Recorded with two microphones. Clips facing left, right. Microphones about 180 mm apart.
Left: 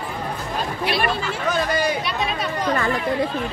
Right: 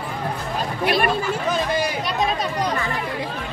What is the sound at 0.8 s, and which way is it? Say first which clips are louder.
Speech: right 3 dB; 55° right (ahead or behind).